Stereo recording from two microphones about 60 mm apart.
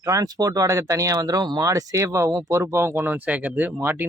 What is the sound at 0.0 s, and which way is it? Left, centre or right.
Speech, right.